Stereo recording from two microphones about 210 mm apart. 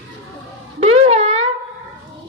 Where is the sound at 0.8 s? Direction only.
30° right (ahead or behind).